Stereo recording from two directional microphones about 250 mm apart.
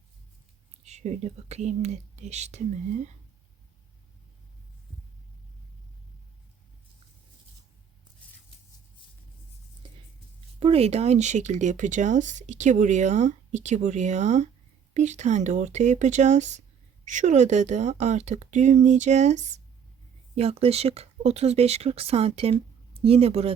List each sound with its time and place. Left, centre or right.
0.9 s speech: right
10.6 s speech: right